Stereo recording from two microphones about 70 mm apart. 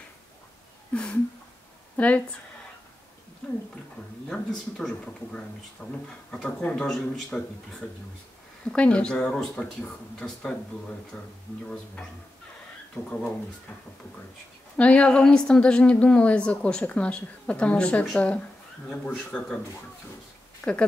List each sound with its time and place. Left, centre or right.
0.9 s a woman's voice: centre
4.3 s a woman's voice: centre
8.7 s a woman's voice: centre
11.1 s a woman's voice: left
14.8 s a woman's voice: centre
19.3 s a woman's voice: centre
20.6 s a woman's voice: centre